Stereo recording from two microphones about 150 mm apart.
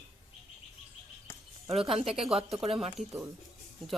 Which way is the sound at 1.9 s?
40° right (ahead or behind).